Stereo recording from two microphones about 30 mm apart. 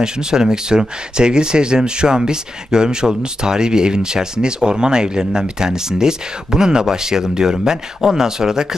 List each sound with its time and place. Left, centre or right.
0.0 s speech: right